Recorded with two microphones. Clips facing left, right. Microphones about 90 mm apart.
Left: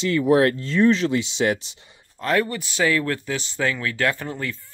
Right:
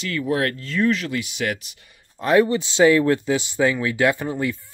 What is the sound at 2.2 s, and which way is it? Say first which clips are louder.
Speech: right 5 dB; 20° right (ahead or behind).